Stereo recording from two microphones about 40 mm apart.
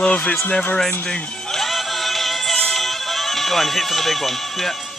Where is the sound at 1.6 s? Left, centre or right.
Centre.